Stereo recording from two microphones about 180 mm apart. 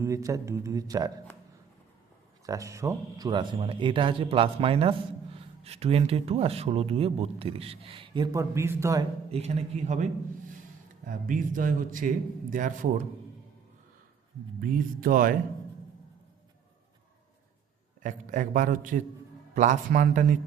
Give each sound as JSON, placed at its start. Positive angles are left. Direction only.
{"t": 0.0, "sound": "speech", "side_deg": -15}
{"t": 2.5, "sound": "speech", "side_deg": -15}
{"t": 9.3, "sound": "a man's voice", "side_deg": -35}
{"t": 14.6, "sound": "a man's voice", "side_deg": -50}
{"t": 18.0, "sound": "a man's voice", "side_deg": -45}